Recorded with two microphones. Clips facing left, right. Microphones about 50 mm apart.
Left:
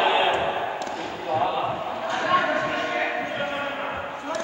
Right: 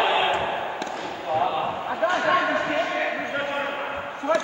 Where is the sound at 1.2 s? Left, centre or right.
Centre.